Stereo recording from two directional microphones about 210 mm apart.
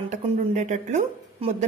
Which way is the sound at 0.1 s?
35° right (ahead or behind).